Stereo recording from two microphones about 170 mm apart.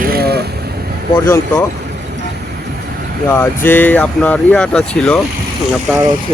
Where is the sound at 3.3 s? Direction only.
15° left (ahead or behind).